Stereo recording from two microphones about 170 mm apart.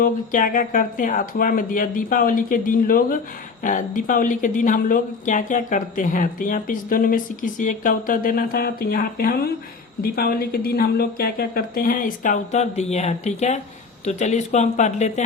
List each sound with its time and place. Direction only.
0.0 s a woman's voice: 50° left (ahead or behind)